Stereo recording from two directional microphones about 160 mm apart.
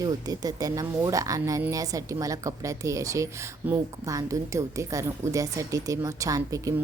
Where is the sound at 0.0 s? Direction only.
20° right (ahead or behind).